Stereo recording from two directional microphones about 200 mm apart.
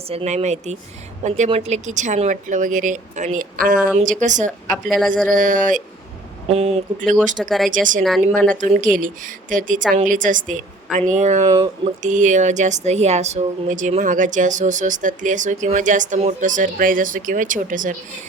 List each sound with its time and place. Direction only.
0.1 s speech: 30° right (ahead or behind)
4.7 s speech: centre (ahead or behind)
5.0 s speech: 40° right (ahead or behind)
6.5 s speech: 30° right (ahead or behind)
7.3 s speech: centre (ahead or behind)
7.7 s speech: 40° right (ahead or behind)
8.3 s speech: 5° left (ahead or behind)
8.6 s speech: 40° right (ahead or behind)